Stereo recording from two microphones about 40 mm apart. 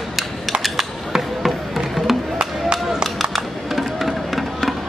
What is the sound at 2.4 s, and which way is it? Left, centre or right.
Chop, right.